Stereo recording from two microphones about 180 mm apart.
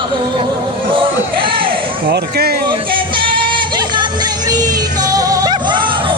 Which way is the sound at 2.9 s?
30° right (ahead or behind).